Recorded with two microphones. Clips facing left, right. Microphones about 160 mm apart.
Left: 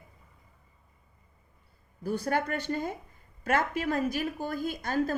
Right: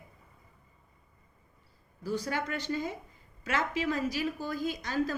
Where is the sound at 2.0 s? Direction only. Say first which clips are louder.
Left 4 dB; 55° left (ahead or behind).